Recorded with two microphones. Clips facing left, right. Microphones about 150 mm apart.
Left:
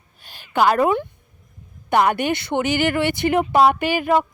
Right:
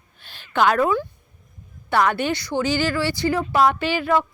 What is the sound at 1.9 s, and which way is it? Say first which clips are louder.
Speech: left 2 dB; 15° left (ahead or behind).